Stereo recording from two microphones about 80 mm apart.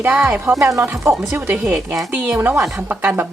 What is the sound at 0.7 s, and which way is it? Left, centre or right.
Speech, right.